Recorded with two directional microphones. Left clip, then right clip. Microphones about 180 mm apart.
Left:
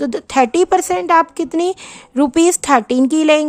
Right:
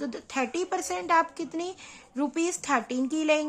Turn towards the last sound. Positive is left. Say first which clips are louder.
# left 13 dB
turn(degrees=70)  # may be behind; listen again after turning